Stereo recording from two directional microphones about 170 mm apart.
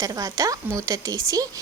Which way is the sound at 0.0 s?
20° right (ahead or behind).